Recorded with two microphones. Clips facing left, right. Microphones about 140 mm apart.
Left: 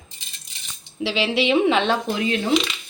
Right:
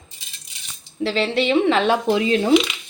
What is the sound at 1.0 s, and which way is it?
Speech, 5° left (ahead or behind).